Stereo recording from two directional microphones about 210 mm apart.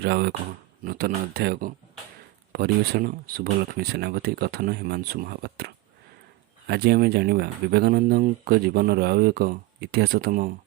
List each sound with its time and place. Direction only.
0.0 s speech: 50° right (ahead or behind)